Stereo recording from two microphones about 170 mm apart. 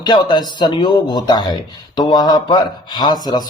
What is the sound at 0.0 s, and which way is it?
A man's voice, 25° left (ahead or behind).